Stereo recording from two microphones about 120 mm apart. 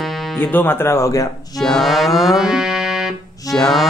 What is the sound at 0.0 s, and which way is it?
Music, centre (ahead or behind).